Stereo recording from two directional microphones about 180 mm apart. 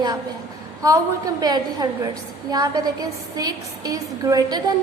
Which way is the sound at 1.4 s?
20° right (ahead or behind).